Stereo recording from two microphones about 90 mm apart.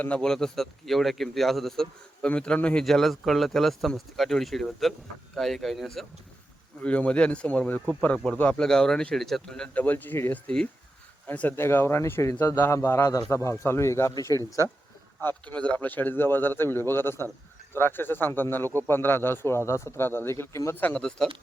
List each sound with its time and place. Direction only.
0.0 s speech: 10° left (ahead or behind)
6.8 s a man's voice: 15° left (ahead or behind); by 14.7 s 35° left (ahead or behind)
15.2 s a man's voice: 20° left (ahead or behind)
20.8 s a man's voice: 10° left (ahead or behind)